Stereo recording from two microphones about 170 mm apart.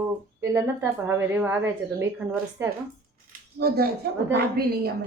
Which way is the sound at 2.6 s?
15° right (ahead or behind).